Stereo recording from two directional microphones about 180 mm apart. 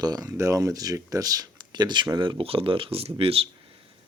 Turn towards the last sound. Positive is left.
turn(degrees=-30)  # may be behind; listen again after turning